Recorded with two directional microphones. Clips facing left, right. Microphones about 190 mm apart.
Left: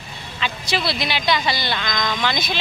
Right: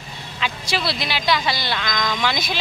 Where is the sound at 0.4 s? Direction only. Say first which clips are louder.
Left 1 dB; 5° right (ahead or behind).